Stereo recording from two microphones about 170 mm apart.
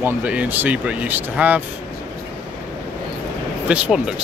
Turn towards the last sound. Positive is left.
turn(degrees=-5)  # may be behind; listen again after turning